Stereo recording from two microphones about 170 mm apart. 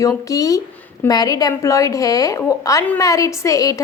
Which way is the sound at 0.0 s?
20° left (ahead or behind).